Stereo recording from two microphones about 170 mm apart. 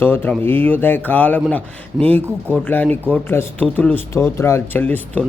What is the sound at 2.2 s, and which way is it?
Speech, 10° right (ahead or behind).